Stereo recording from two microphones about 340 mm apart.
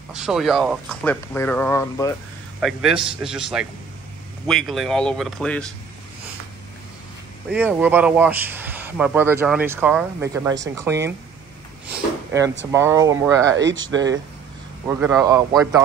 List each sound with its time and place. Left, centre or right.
0.2 s speech: centre
7.5 s speech: centre
13.5 s speech: right
14.9 s speech: centre